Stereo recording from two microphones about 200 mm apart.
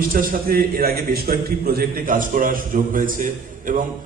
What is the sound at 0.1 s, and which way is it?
A man's voice, 45° right (ahead or behind).